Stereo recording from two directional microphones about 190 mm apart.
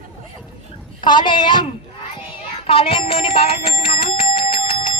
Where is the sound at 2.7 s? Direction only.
30° left (ahead or behind).